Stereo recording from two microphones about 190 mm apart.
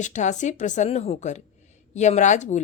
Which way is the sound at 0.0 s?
40° left (ahead or behind).